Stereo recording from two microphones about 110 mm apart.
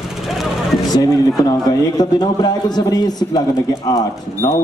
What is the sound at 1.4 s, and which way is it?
A man's voice, 35° left (ahead or behind).